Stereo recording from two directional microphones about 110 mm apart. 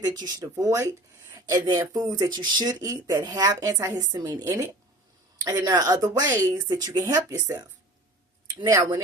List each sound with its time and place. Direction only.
0.0 s a woman's voice: 35° right (ahead or behind)
8.6 s speech: 30° right (ahead or behind)